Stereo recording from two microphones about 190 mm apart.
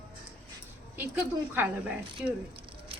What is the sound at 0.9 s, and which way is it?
Speech, 10° right (ahead or behind).